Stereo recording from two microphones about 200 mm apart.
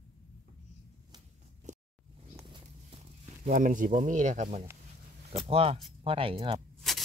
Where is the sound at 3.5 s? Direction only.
40° right (ahead or behind).